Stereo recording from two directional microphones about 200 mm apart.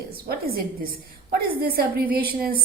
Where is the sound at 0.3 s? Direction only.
50° right (ahead or behind).